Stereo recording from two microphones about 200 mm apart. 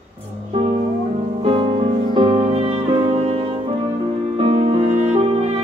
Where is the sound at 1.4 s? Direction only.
25° right (ahead or behind).